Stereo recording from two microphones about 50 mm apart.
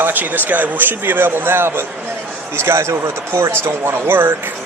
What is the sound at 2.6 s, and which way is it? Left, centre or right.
Speech, right.